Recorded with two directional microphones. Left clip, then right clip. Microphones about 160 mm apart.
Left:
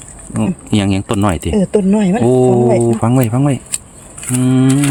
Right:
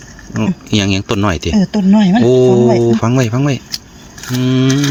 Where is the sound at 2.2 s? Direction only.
15° left (ahead or behind).